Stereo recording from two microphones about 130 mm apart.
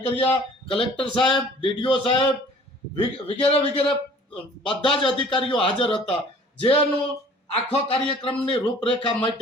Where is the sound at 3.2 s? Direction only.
50° left (ahead or behind).